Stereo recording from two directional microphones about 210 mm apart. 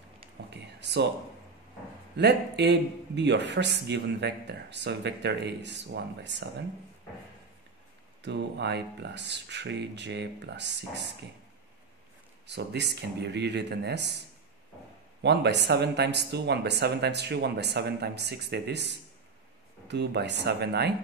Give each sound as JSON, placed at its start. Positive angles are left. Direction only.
{"t": 0.7, "sound": "a sound", "side_deg": -55}
{"t": 2.1, "sound": "a man's voice", "side_deg": -55}
{"t": 8.2, "sound": "a man's voice", "side_deg": -55}
{"t": 12.4, "sound": "speech", "side_deg": -55}
{"t": 15.2, "sound": "speech", "side_deg": -55}